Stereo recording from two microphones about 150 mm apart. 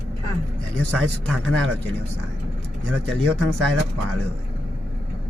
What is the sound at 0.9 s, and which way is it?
A man's voice, 10° left (ahead or behind).